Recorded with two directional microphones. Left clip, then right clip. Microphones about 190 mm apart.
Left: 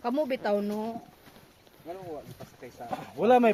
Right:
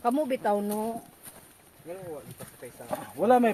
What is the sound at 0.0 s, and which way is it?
Speech, 10° left (ahead or behind).